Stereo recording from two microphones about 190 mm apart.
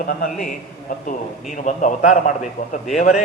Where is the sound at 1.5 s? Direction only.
40° left (ahead or behind).